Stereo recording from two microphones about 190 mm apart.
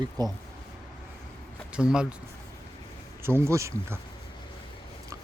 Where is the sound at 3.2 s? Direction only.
15° right (ahead or behind).